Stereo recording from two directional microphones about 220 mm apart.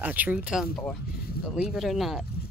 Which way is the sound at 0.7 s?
5° left (ahead or behind).